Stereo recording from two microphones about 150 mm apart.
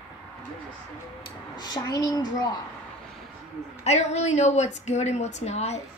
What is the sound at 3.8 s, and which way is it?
A woman's voice, 45° left (ahead or behind).